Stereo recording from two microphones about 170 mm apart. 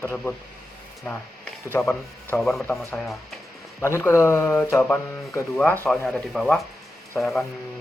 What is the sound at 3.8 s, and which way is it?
Speech, 15° left (ahead or behind).